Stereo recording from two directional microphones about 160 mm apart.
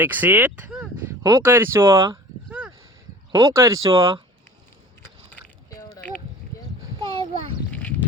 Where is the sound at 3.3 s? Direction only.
20° right (ahead or behind).